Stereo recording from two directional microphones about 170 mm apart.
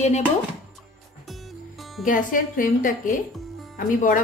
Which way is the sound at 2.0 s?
50° left (ahead or behind).